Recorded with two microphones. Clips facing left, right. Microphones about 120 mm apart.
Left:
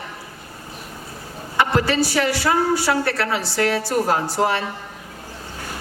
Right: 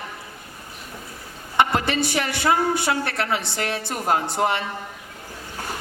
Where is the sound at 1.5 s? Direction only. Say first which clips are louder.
Left 2 dB; 20° right (ahead or behind).